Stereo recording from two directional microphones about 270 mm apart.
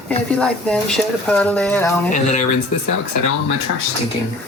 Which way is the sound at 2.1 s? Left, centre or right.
Left.